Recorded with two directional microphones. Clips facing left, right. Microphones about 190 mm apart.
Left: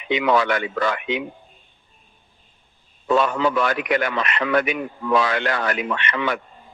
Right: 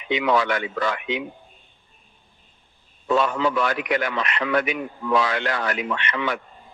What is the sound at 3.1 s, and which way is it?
A man's voice, 60° left (ahead or behind).